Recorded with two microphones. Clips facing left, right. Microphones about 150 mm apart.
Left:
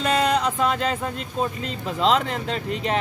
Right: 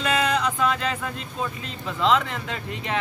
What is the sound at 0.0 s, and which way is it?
Music, 35° left (ahead or behind).